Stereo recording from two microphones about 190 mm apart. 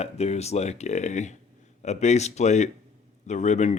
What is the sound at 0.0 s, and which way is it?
Speech, 35° left (ahead or behind).